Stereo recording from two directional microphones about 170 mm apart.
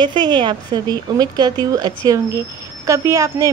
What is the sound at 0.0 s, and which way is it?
Speech, 25° right (ahead or behind).